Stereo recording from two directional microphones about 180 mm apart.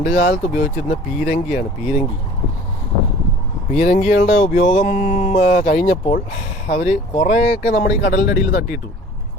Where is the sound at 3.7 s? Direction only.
40° left (ahead or behind).